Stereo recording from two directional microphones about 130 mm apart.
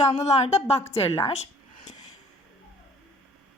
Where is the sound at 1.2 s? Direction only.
55° left (ahead or behind).